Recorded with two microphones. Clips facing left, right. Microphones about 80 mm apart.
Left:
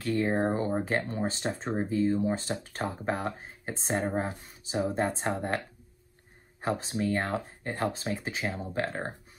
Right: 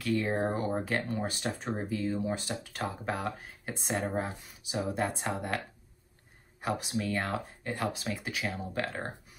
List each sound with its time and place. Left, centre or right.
0.0 s speech: left
6.6 s speech: left